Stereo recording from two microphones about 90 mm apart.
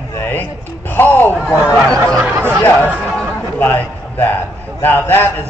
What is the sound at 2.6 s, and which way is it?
A man's voice, 15° left (ahead or behind).